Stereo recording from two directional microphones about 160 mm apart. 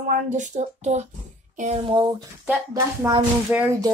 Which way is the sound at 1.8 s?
30° right (ahead or behind).